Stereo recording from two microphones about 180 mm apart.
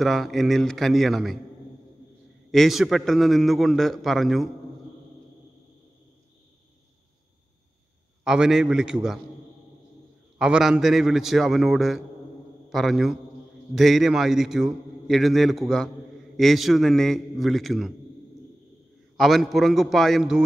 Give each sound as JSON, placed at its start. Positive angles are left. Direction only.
{"t": 0.0, "sound": "a man's voice", "side_deg": 0}
{"t": 2.5, "sound": "a man's voice", "side_deg": 0}
{"t": 8.2, "sound": "a man's voice", "side_deg": -5}
{"t": 10.4, "sound": "a man's voice", "side_deg": -5}
{"t": 19.1, "sound": "a man's voice", "side_deg": 0}